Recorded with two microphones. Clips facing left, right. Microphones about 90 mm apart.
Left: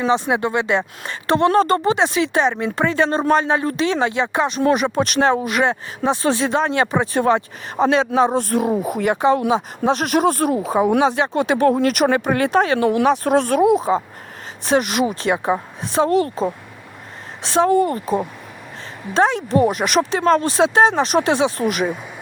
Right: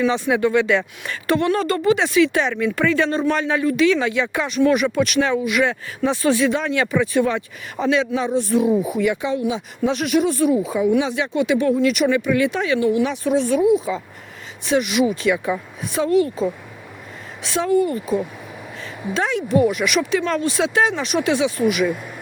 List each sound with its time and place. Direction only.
0.0 s speech: 30° left (ahead or behind)
12.8 s speech: 60° left (ahead or behind)
13.7 s speech: 40° left (ahead or behind)
18.0 s speech: 35° left (ahead or behind)